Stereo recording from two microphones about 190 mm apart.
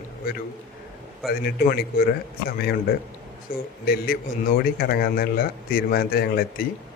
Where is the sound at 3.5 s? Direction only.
50° left (ahead or behind).